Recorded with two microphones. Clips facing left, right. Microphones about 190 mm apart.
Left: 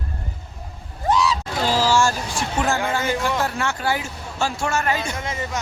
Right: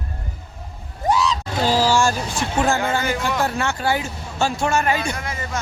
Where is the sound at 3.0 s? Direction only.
25° left (ahead or behind).